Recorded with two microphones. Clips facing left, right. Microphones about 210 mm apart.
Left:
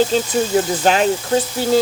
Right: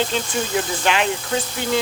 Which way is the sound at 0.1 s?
40° left (ahead or behind).